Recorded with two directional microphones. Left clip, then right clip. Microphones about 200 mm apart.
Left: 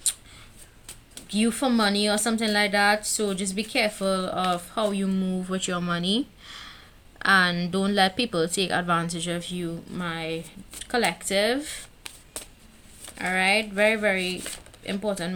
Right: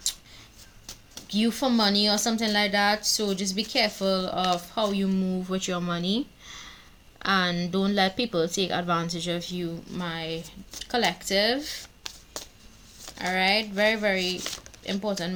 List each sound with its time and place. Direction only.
1.3 s speech: 25° left (ahead or behind)